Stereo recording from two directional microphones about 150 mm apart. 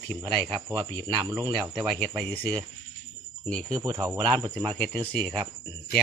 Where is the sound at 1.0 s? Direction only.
25° right (ahead or behind).